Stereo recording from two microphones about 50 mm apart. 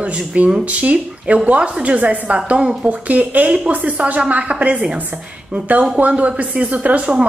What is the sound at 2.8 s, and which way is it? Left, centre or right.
A woman's voice, right.